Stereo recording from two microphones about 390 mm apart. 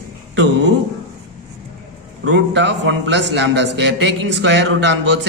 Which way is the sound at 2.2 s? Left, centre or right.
Right.